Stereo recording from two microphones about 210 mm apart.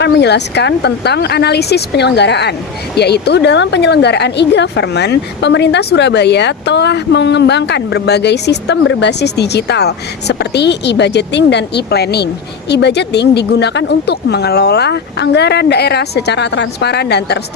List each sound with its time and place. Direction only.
0.0 s speech: 55° left (ahead or behind)